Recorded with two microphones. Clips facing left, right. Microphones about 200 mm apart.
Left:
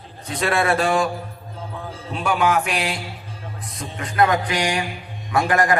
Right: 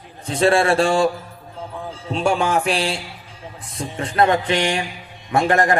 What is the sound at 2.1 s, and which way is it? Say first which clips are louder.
Speech: right 1 dB; 30° right (ahead or behind).